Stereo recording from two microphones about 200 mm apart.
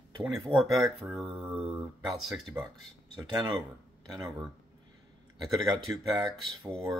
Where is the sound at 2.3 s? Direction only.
15° right (ahead or behind).